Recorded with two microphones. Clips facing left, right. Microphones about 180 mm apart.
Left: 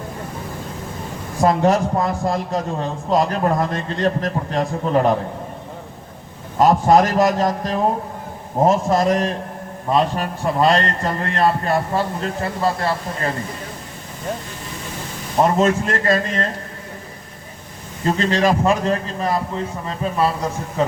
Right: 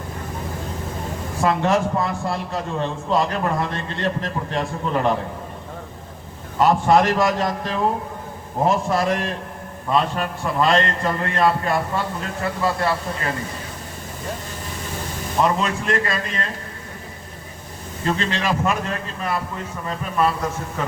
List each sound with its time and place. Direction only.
1.4 s a man's voice: 40° left (ahead or behind)
6.6 s a man's voice: 40° left (ahead or behind)
15.4 s a man's voice: 45° left (ahead or behind)
18.0 s a man's voice: 40° left (ahead or behind)